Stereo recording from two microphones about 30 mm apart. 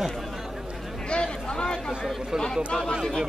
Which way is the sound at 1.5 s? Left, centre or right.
Left.